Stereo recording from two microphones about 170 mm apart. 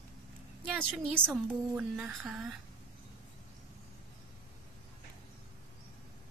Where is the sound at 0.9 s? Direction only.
5° right (ahead or behind).